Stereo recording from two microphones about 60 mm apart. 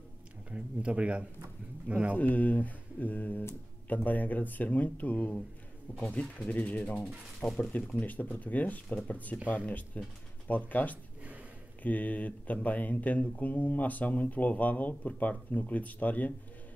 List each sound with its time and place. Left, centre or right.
0.5 s speech: centre
2.1 s speech: left